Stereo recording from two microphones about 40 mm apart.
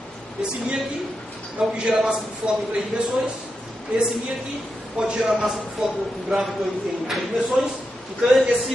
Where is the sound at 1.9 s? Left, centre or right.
Centre.